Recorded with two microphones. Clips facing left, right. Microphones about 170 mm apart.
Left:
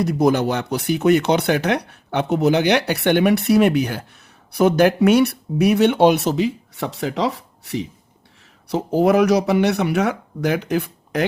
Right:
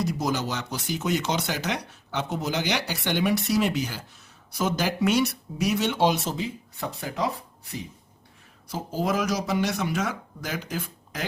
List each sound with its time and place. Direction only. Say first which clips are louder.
0.0 s speech: left 10 dB; 60° left (ahead or behind); by 7.9 s 85° left
8.6 s speech: left 11 dB; 65° left (ahead or behind)